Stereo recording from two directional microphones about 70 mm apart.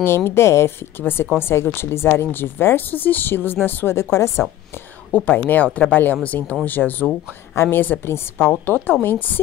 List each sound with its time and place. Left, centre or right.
0.0 s a woman's voice: left
1.0 s a woman's voice: left
5.1 s speech: left